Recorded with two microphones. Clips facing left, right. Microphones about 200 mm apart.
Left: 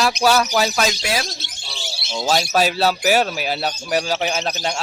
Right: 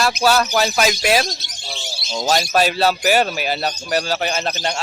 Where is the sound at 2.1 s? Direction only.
15° right (ahead or behind).